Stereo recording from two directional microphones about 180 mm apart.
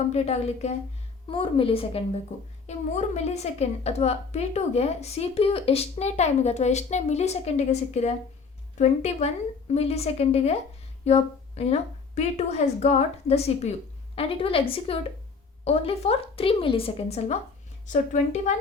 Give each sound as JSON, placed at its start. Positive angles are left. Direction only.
{"t": 0.1, "sound": "a woman's voice", "side_deg": 35}